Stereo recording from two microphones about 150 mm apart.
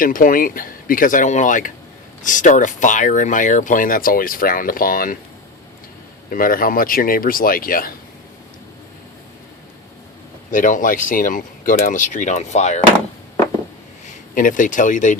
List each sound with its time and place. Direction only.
0.0 s speech: 65° left (ahead or behind)
6.3 s speech: 70° left (ahead or behind)
10.5 s speech: 60° left (ahead or behind)
14.3 s speech: 60° left (ahead or behind)